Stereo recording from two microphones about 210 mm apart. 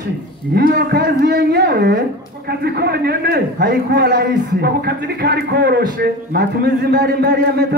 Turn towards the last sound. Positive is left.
turn(degrees=-50)  # may be behind; listen again after turning